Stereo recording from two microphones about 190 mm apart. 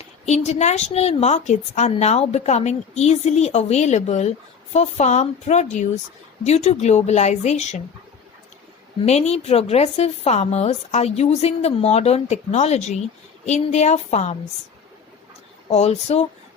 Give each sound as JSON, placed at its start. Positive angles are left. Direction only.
{"t": 0.0, "sound": "a woman's voice", "side_deg": 35}
{"t": 9.0, "sound": "a woman's voice", "side_deg": 35}
{"t": 15.7, "sound": "a woman's voice", "side_deg": 35}